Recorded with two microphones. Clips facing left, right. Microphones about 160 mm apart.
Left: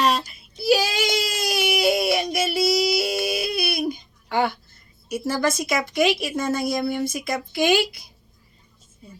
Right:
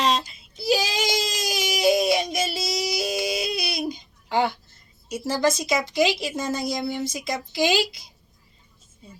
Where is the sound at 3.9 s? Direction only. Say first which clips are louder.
Even; 25° right (ahead or behind).